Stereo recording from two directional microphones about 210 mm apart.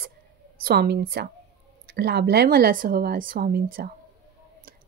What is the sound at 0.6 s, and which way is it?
A woman's voice, 50° right (ahead or behind).